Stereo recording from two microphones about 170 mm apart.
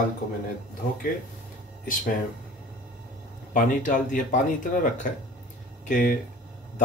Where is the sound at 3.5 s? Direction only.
50° left (ahead or behind).